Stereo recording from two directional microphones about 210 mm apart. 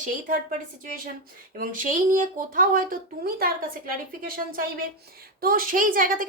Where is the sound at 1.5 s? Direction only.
40° right (ahead or behind).